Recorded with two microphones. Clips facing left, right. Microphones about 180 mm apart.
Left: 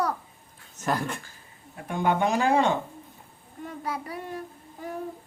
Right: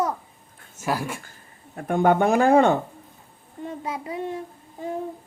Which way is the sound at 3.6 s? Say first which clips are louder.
Right 3 dB; 20° right (ahead or behind).